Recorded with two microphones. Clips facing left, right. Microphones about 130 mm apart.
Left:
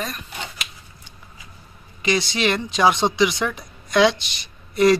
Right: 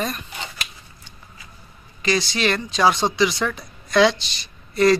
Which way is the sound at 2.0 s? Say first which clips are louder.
Even; 15° left (ahead or behind).